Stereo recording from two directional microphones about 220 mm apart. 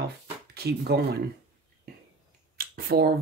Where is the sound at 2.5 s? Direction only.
45° right (ahead or behind).